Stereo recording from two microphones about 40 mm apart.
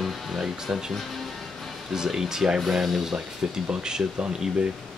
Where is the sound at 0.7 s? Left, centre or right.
Centre.